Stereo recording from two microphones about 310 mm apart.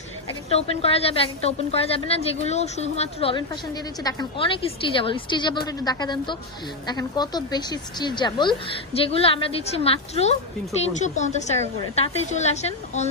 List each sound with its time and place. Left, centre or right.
0.5 s a woman's voice: centre